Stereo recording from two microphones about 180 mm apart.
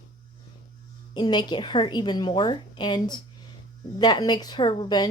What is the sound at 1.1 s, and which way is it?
A woman's voice, 25° left (ahead or behind).